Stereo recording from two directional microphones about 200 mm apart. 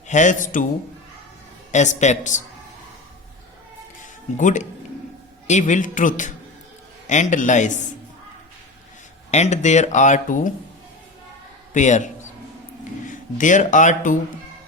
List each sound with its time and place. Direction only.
0.1 s speech: 40° left (ahead or behind)
1.7 s speech: 35° left (ahead or behind)
4.4 s speech: 40° left (ahead or behind)
9.3 s speech: 35° left (ahead or behind)
11.7 s speech: 35° left (ahead or behind)